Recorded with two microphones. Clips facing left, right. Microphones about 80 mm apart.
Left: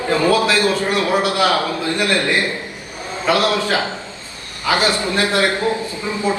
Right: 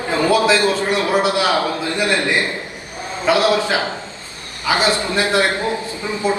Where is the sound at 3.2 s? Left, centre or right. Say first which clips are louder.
Right 1 dB; right.